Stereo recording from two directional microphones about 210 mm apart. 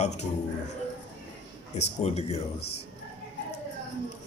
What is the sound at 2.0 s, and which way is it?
Speech, 30° left (ahead or behind).